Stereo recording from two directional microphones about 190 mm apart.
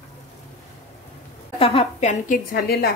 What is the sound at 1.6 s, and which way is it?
Speech, 30° left (ahead or behind).